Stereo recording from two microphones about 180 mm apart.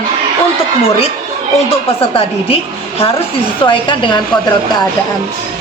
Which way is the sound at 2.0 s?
30° left (ahead or behind).